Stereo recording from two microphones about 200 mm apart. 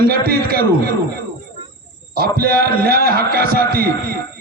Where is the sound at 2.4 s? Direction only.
50° right (ahead or behind).